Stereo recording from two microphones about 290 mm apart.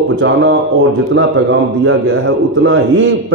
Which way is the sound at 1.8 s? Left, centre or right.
Right.